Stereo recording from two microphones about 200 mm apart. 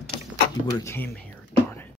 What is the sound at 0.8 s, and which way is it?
Speech, 10° left (ahead or behind).